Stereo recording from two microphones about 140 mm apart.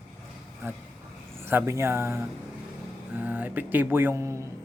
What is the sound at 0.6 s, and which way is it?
A man's voice, 15° right (ahead or behind).